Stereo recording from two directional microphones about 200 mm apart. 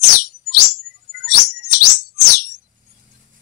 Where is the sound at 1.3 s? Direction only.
50° left (ahead or behind).